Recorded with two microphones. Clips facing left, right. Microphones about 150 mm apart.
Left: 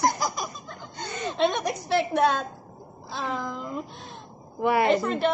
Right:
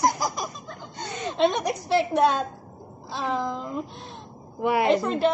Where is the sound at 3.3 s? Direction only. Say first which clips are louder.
Right 6 dB; 30° right (ahead or behind).